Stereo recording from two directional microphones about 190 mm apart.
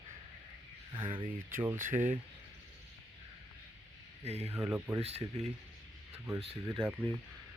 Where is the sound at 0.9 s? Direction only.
25° right (ahead or behind).